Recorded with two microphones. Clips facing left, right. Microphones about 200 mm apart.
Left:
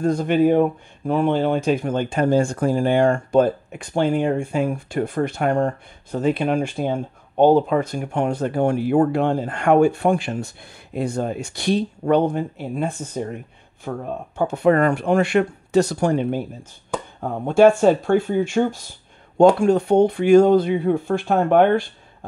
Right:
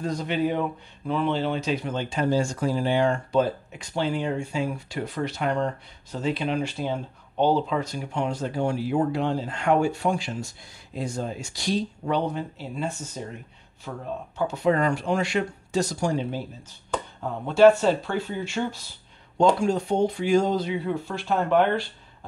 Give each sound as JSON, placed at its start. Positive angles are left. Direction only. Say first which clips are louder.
{"t": 0.0, "sound": "speech", "louder": "left 8 dB", "side_deg": 50}